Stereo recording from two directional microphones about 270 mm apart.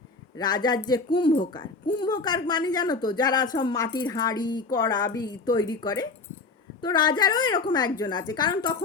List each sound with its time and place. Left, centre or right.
0.3 s a woman's voice: centre